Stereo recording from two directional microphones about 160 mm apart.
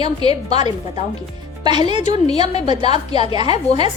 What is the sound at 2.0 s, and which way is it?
Speech, 45° left (ahead or behind).